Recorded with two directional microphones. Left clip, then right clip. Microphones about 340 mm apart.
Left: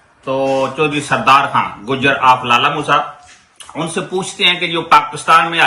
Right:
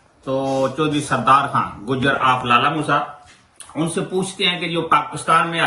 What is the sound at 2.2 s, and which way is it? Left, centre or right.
Speech, centre.